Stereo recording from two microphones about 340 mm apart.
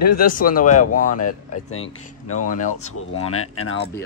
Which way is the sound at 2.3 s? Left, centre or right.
Left.